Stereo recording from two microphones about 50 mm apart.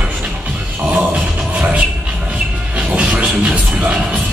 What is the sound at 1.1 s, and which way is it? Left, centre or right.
Music, right.